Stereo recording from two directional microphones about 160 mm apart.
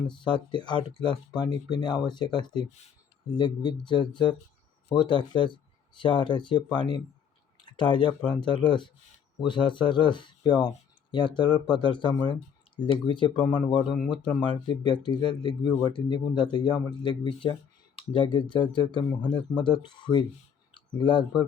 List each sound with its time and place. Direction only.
0.3 s speech: 30° left (ahead or behind)